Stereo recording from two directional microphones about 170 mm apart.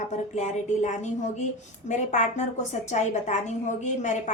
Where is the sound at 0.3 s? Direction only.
45° left (ahead or behind).